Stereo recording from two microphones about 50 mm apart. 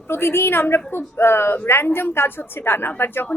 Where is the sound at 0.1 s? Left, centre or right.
Left.